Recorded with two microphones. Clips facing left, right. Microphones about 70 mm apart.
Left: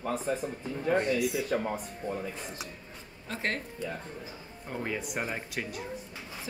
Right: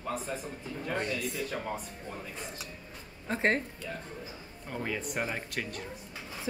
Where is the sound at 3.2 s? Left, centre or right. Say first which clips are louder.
Right 5 dB; right.